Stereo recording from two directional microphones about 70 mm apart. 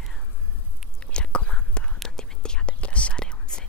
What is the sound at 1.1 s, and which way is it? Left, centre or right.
Whispering, centre.